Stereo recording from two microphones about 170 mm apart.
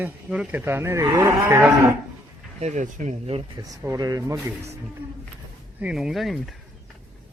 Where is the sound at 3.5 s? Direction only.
20° right (ahead or behind).